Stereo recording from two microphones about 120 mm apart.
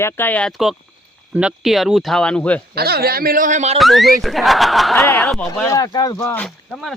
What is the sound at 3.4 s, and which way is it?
Speech, 80° right.